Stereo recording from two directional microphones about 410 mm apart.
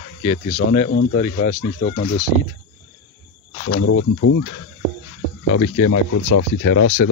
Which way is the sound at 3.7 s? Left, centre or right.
Left.